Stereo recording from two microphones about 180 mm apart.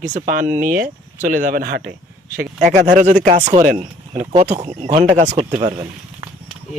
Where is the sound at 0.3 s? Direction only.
55° right (ahead or behind).